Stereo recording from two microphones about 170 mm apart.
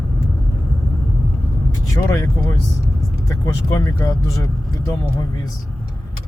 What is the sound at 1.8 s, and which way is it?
Speech, 20° left (ahead or behind).